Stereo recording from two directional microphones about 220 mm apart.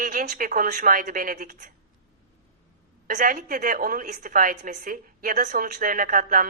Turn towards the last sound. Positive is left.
turn(degrees=-40)  # may be behind; listen again after turning